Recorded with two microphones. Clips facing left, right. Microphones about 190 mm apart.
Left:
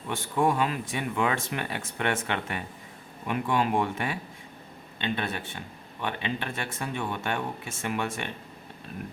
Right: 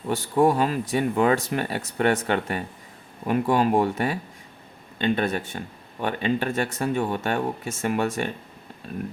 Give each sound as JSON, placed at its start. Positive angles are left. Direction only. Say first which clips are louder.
{"t": 0.1, "sound": "speech", "louder": "right 6 dB", "side_deg": -35}